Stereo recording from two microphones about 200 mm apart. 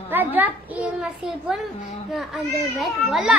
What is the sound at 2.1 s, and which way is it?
A child's voice, centre (ahead or behind).